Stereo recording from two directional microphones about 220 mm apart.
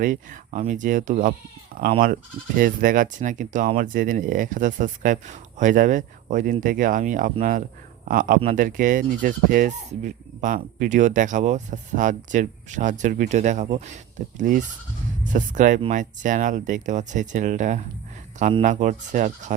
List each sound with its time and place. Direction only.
0.0 s speech: 35° right (ahead or behind)